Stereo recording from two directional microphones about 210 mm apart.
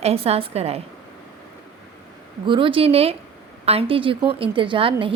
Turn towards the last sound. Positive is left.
turn(degrees=-25)  # may be behind; listen again after turning